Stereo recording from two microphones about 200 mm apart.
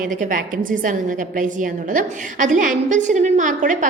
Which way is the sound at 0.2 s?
40° right (ahead or behind).